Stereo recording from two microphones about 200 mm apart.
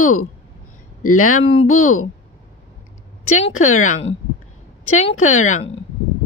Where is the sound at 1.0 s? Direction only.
90° left.